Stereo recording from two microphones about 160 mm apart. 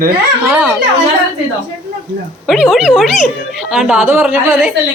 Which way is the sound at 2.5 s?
5° right (ahead or behind).